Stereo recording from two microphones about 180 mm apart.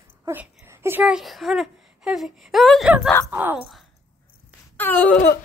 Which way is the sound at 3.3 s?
10° right (ahead or behind).